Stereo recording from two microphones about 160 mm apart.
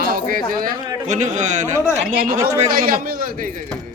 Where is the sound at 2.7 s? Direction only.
60° right (ahead or behind).